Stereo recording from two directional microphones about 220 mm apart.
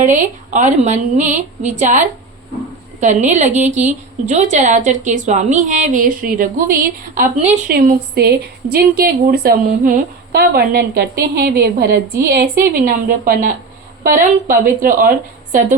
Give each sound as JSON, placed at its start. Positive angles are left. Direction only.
{"t": 0.0, "sound": "a woman's voice", "side_deg": -35}
{"t": 7.3, "sound": "speech", "side_deg": -30}
{"t": 7.7, "sound": "a woman's voice", "side_deg": -45}